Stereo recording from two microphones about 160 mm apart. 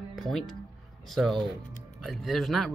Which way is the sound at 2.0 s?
Centre (ahead or behind).